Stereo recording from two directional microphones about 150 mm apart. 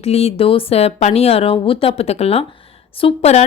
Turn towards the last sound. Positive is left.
turn(degrees=45)  # may be behind; listen again after turning